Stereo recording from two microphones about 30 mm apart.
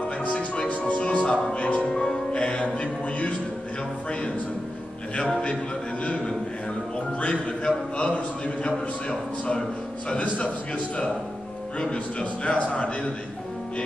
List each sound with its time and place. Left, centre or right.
0.0 s music: left
1.0 s music: left
1.9 s music: left
7.2 s a sound: left
10.1 s a man's voice: left
11.9 s speech: left